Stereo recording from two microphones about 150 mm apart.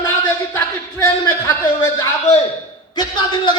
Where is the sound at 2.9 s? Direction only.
30° left (ahead or behind).